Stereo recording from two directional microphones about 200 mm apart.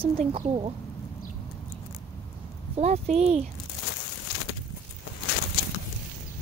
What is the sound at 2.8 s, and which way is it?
Speech, 30° right (ahead or behind).